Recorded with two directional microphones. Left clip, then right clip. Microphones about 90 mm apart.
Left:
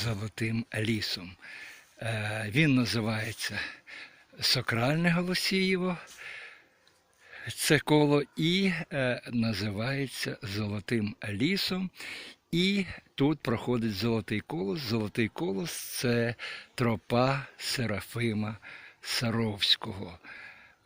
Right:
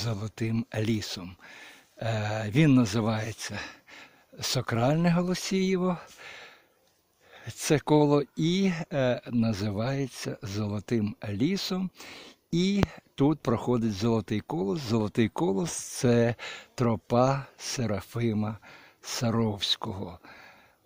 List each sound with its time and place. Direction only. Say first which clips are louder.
0.3 s speech: right 1 dB; 30° right (ahead or behind)
2.6 s speech: right 3 dB; 55° right (ahead or behind); by 4.7 s 40° right (ahead or behind)
4.7 s speech: right 2 dB; 25° right (ahead or behind); by 6.5 s 45° right (ahead or behind)
7.3 s speech: left 1 dB; 25° right (ahead or behind)
14.7 s speech: right 2 dB; 45° right (ahead or behind)
15.4 s speech: right 5 dB; 65° right (ahead or behind)
16.0 s speech: right 5 dB; 45° right (ahead or behind)
16.7 s speech: right 3 dB; 20° right (ahead or behind)